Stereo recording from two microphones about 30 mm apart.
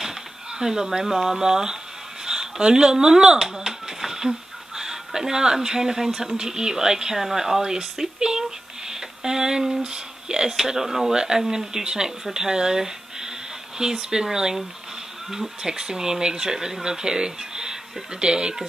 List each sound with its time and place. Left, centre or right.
0.6 s speech: centre
3.5 s a sound: centre
6.3 s speech: right
11.1 s speech: right